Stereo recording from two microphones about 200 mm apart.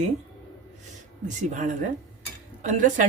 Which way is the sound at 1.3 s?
40° right (ahead or behind).